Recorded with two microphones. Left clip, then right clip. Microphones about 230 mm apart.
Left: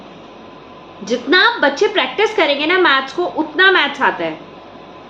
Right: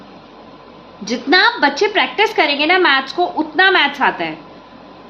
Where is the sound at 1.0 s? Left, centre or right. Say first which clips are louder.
Even; right.